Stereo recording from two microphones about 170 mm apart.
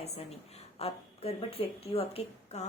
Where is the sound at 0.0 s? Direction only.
40° left (ahead or behind).